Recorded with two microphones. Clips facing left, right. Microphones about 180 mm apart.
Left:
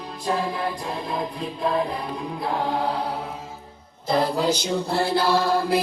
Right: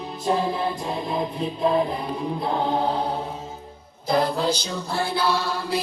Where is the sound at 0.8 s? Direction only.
Centre (ahead or behind).